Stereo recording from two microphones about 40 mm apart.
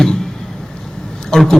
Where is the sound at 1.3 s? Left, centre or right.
Centre.